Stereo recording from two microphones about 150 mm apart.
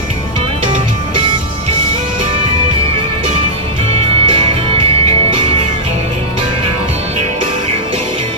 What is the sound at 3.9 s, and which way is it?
Music, 40° right (ahead or behind).